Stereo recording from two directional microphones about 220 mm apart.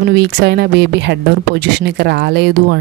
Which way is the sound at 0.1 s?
50° right (ahead or behind).